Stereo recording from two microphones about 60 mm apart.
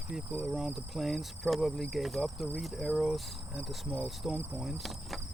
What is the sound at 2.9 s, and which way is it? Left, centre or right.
Cricket, centre.